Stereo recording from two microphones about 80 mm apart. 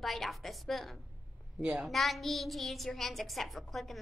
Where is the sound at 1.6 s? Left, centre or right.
Centre.